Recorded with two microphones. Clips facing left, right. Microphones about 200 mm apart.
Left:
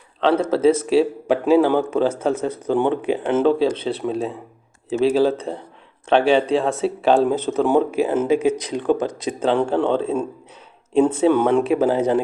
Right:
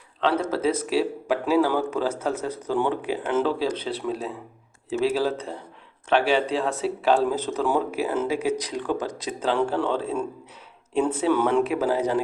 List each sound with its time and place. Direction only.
0.2 s speech: 30° left (ahead or behind)